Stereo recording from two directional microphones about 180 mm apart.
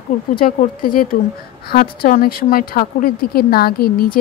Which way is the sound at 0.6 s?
50° left (ahead or behind).